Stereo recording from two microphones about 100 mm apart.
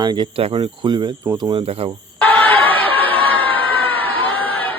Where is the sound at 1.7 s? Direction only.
75° right (ahead or behind).